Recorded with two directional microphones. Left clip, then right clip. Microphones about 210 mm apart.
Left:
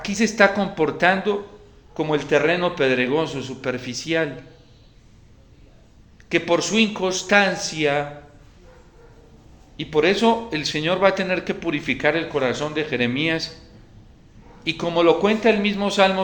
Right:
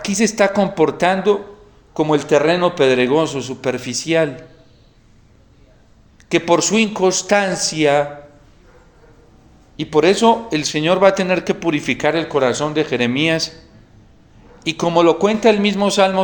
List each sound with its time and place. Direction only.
0.0 s speech: 35° right (ahead or behind)
6.2 s speech: 35° right (ahead or behind)
9.7 s speech: 35° right (ahead or behind)
14.6 s speech: 35° right (ahead or behind)